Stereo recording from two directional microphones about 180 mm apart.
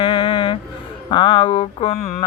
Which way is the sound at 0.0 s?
30° left (ahead or behind).